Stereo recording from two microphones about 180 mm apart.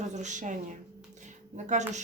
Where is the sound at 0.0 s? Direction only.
40° right (ahead or behind).